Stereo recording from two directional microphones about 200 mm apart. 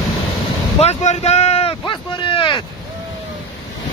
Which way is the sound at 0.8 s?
35° left (ahead or behind).